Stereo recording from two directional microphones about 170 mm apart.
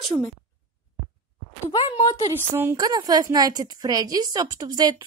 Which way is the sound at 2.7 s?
25° right (ahead or behind).